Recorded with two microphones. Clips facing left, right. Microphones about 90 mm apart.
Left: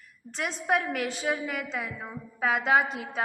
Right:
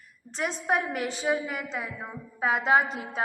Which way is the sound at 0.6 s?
20° right (ahead or behind).